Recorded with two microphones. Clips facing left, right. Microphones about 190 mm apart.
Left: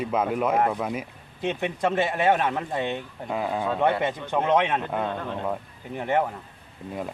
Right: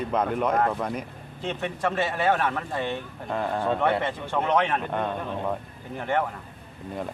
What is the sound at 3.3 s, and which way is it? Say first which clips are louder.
A man's voice: right 1 dB; 5° left (ahead or behind).